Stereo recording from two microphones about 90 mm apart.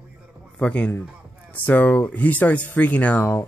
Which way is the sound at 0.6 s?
15° left (ahead or behind).